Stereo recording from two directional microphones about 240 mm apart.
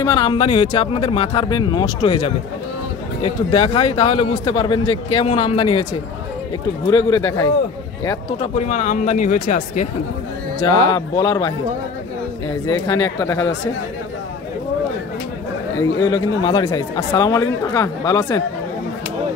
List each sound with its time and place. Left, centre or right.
0.0 s a man's voice: centre
6.9 s speech: centre
8.5 s speech: left
10.9 s speech: centre
12.8 s speech: centre
16.1 s speech: centre